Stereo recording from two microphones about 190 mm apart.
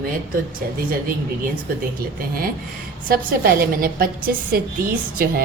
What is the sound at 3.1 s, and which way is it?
A woman's voice, 50° right (ahead or behind).